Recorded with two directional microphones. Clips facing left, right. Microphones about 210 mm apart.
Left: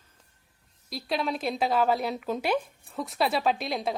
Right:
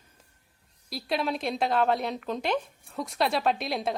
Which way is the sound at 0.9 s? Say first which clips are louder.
Even; centre (ahead or behind).